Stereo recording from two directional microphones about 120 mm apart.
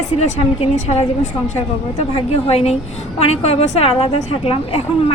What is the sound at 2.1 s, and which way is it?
Speech, 55° left (ahead or behind).